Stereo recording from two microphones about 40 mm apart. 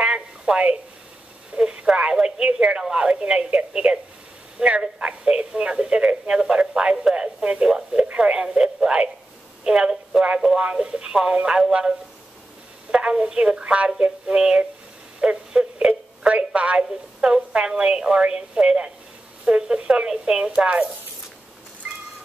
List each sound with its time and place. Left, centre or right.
0.0 s a sound: right
1.5 s a woman's voice: right
12.9 s a woman's voice: right
20.5 s speech: right